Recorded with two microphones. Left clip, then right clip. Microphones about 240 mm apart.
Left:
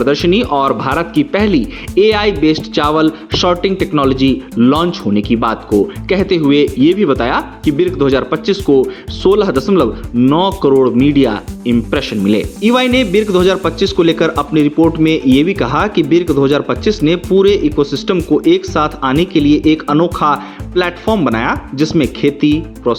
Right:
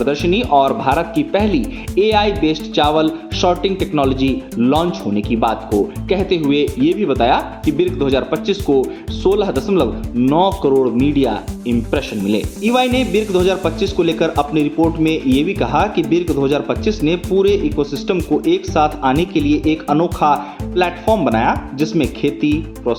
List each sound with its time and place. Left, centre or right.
0.0 s speech: left